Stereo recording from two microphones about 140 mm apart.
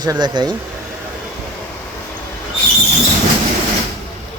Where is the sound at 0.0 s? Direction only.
30° right (ahead or behind).